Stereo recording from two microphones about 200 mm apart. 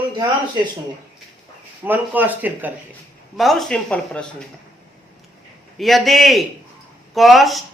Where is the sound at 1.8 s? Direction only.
10° right (ahead or behind).